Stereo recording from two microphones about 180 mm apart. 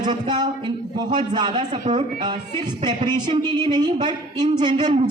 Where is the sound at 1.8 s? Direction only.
40° right (ahead or behind).